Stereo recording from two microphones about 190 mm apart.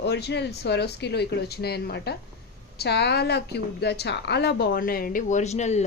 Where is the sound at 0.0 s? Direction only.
60° left (ahead or behind).